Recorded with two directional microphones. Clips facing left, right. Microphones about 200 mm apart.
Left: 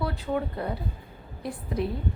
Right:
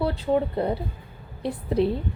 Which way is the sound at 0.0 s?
25° right (ahead or behind).